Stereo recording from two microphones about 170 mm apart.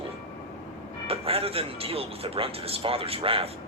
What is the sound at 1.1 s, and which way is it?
Speech, 35° right (ahead or behind).